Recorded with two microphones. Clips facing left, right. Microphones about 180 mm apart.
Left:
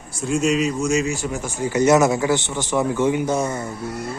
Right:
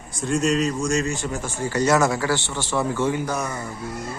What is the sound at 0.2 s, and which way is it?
A man's voice, centre (ahead or behind).